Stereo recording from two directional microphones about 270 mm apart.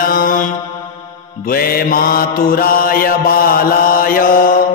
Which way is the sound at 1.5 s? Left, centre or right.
Left.